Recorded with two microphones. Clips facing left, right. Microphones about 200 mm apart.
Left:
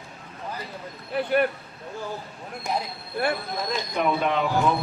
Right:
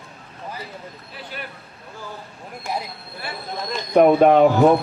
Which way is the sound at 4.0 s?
50° right (ahead or behind).